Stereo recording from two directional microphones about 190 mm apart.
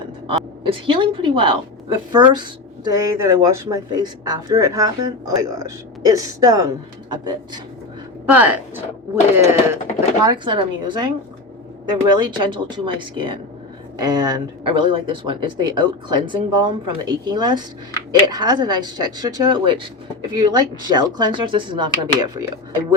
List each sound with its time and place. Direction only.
0.3 s a woman's voice: 30° right (ahead or behind)
2.9 s speech: 15° right (ahead or behind)
8.3 s speech: 10° right (ahead or behind)